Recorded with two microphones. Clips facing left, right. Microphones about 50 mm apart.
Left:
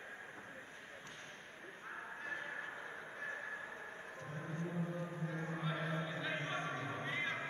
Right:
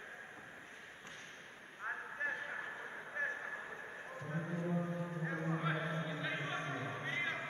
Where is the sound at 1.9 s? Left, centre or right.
Right.